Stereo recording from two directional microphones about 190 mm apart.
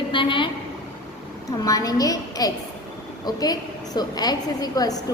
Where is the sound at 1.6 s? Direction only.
20° left (ahead or behind).